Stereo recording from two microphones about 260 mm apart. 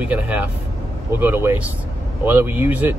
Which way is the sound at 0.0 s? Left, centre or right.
Centre.